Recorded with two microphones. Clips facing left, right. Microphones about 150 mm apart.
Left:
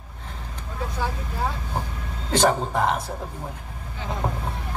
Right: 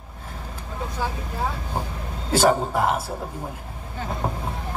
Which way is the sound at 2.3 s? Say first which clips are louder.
Right 1 dB; 5° right (ahead or behind).